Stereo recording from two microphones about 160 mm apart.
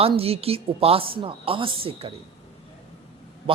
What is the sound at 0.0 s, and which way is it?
A woman's voice, 40° right (ahead or behind).